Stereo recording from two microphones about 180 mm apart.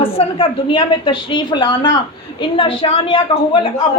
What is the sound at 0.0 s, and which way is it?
A woman's voice, 30° left (ahead or behind).